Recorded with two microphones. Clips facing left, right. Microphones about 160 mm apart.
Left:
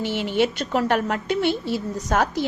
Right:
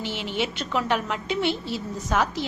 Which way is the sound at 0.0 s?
55° left (ahead or behind).